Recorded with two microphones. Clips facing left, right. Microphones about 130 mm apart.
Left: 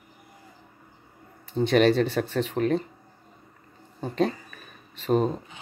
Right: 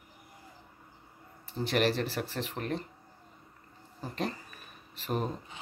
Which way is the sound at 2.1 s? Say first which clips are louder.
Left 9 dB; 90° left.